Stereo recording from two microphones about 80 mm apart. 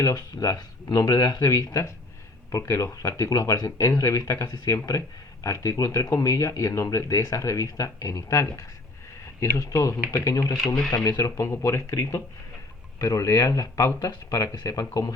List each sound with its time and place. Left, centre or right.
0.0 s speech: left